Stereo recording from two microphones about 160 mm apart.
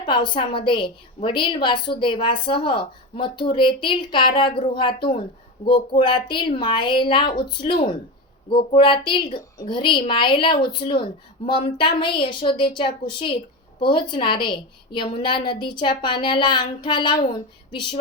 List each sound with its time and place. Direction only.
0.0 s speech: 30° left (ahead or behind)